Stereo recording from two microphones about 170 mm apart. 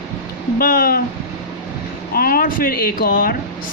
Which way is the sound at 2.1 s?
60° left (ahead or behind).